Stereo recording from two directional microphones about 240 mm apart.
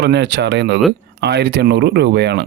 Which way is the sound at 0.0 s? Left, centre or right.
Right.